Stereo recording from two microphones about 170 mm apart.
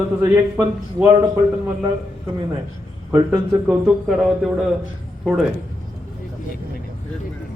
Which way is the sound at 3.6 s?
Centre (ahead or behind).